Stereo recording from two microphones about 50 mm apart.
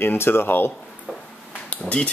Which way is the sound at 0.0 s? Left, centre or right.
Left.